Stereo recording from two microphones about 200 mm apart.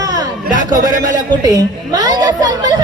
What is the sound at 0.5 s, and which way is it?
Speech, 20° right (ahead or behind).